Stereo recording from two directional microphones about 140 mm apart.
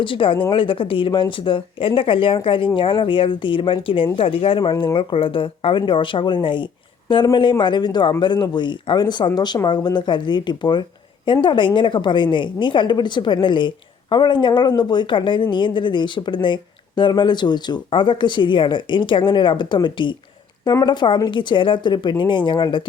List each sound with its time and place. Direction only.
0.0 s a woman's voice: 40° left (ahead or behind)